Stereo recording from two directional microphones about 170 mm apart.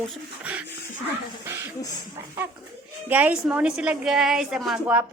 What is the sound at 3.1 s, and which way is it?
A woman's voice, 10° right (ahead or behind).